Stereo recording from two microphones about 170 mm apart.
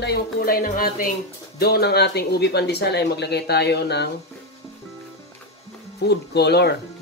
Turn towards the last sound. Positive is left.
turn(degrees=75)  # may be behind; listen again after turning